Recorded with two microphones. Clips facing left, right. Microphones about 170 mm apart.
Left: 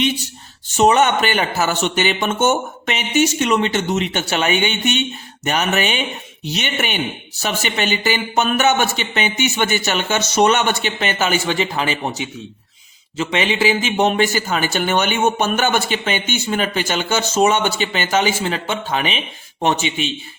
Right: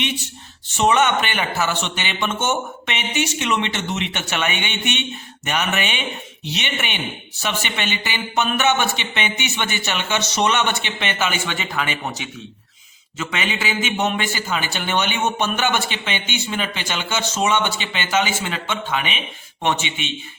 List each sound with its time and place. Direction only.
0.8 s a man's voice: 40° left (ahead or behind)